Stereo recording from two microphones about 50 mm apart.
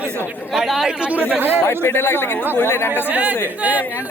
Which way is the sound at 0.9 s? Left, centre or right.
Centre.